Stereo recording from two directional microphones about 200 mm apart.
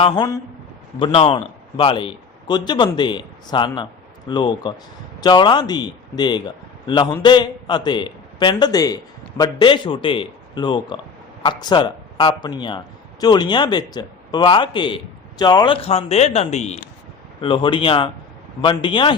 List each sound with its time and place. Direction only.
0.0 s a man's voice: 20° left (ahead or behind)
17.4 s a man's voice: 25° left (ahead or behind)